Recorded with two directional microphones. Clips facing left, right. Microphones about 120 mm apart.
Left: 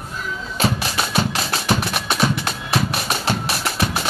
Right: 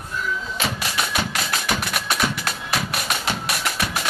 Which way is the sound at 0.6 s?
30° left (ahead or behind).